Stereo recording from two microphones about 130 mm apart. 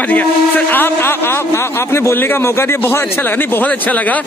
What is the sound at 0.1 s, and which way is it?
A man's voice, 15° left (ahead or behind).